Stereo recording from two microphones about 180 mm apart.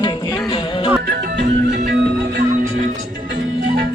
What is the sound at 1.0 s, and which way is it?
Music, 60° right (ahead or behind).